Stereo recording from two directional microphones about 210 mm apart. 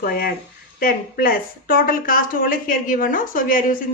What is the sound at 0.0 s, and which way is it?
A woman's voice, 45° left (ahead or behind).